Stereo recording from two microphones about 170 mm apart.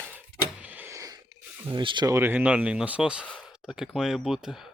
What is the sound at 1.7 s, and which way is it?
Speech, 30° right (ahead or behind).